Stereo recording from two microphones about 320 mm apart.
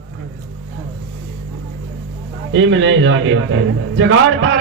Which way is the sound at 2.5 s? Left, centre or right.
Right.